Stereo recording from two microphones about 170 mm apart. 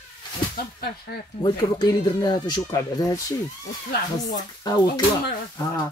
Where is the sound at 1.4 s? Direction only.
25° left (ahead or behind).